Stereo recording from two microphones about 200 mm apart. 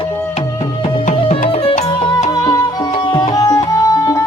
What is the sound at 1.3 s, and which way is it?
Music, 30° left (ahead or behind).